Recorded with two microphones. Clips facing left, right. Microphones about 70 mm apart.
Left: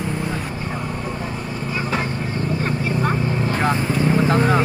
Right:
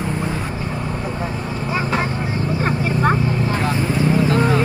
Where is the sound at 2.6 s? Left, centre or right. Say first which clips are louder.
Right 5 dB; right.